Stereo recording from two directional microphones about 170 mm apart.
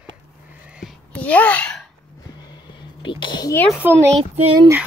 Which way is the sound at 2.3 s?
25° left (ahead or behind).